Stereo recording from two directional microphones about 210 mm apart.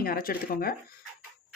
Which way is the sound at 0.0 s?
45° left (ahead or behind).